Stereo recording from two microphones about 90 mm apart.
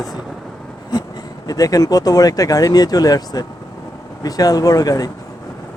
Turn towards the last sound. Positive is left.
turn(degrees=40)  # may be behind; listen again after turning